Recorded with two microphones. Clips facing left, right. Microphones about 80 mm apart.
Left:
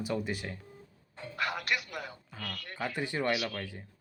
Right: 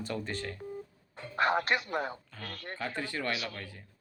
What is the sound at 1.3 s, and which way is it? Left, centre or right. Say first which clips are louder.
Speech: right 5 dB; right.